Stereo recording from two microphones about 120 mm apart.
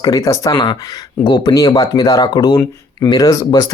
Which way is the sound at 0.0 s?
35° left (ahead or behind).